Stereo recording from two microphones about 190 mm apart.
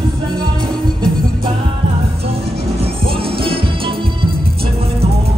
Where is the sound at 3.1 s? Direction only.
30° right (ahead or behind).